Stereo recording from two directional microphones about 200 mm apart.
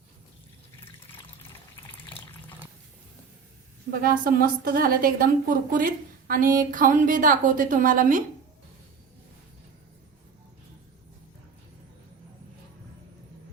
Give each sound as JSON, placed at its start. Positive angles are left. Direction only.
{"t": 0.9, "sound": "water", "side_deg": 25}
{"t": 4.0, "sound": "a woman's voice", "side_deg": -45}